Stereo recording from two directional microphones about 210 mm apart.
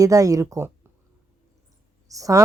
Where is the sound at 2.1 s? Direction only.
15° right (ahead or behind).